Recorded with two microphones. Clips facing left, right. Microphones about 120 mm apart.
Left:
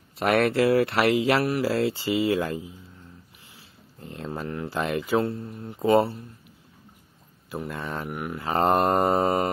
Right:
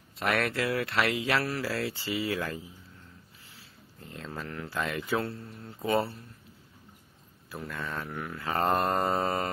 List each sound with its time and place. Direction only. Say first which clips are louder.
0.2 s speech: left 8 dB; 30° left (ahead or behind)
4.0 s speech: left 6 dB; 30° left (ahead or behind)
7.5 s speech: left 5 dB; 30° left (ahead or behind)